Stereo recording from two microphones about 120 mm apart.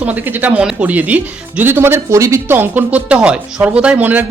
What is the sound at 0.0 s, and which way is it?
Speech, 15° right (ahead or behind).